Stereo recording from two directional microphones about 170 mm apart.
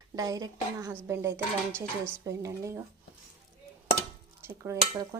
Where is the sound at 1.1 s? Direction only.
15° right (ahead or behind).